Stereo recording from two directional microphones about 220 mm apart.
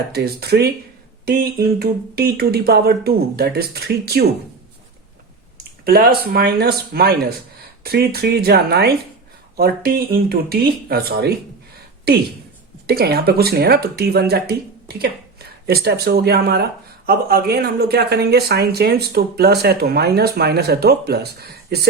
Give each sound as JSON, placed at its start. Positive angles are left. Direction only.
{"t": 0.1, "sound": "speech", "side_deg": -45}
{"t": 5.8, "sound": "speech", "side_deg": -45}